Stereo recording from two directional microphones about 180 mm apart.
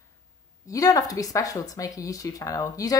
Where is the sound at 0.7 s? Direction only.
20° left (ahead or behind).